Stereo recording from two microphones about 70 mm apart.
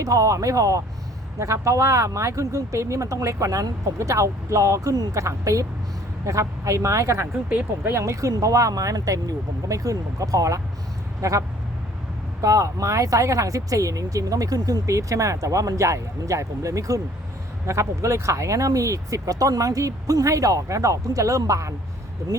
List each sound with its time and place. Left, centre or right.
0.0 s speech: right